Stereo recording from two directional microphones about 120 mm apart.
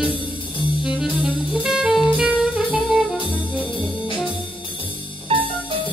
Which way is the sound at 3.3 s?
5° right (ahead or behind).